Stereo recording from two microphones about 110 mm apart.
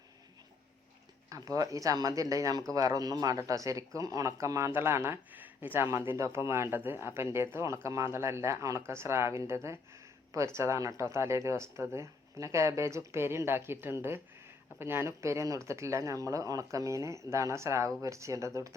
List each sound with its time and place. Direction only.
1.3 s speech: 30° right (ahead or behind)